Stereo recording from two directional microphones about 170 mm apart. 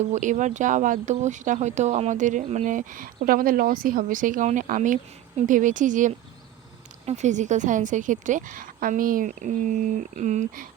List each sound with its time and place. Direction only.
0.0 s speech: 45° right (ahead or behind)